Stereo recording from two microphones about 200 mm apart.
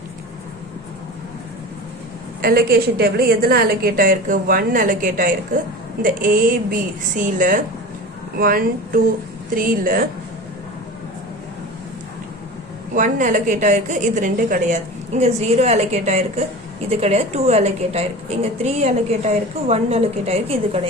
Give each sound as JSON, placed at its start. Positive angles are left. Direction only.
{"t": 2.4, "sound": "a woman's voice", "side_deg": -50}
{"t": 12.9, "sound": "a woman's voice", "side_deg": -40}